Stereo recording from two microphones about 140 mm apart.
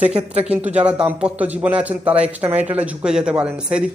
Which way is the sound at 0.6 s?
10° right (ahead or behind).